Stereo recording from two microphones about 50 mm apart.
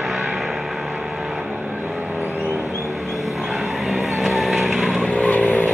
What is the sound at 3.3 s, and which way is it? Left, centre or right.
Vehicle, centre.